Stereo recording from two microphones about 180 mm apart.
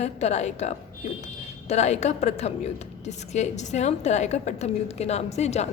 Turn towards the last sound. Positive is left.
turn(degrees=35)  # may be behind; listen again after turning